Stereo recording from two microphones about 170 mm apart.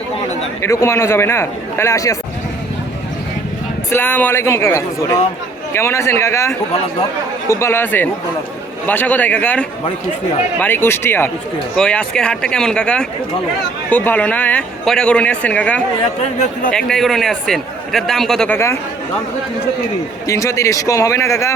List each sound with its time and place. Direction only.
0.6 s a man's voice: 15° left (ahead or behind)
3.8 s a man's voice: 10° left (ahead or behind)
20.2 s a man's voice: 20° left (ahead or behind)